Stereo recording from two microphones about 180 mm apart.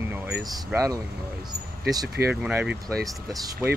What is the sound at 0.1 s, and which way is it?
Air conditioning, 10° right (ahead or behind).